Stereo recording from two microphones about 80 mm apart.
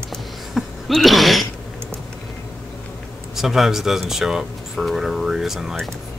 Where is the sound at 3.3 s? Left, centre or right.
Centre.